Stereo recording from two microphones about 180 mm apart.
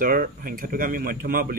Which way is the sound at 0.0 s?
50° right (ahead or behind).